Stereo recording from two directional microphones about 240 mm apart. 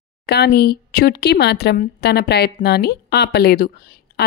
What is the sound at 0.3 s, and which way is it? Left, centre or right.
Speech, left.